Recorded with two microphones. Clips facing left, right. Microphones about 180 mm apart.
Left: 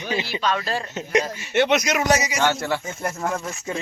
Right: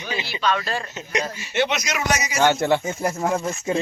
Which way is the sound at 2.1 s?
25° left (ahead or behind).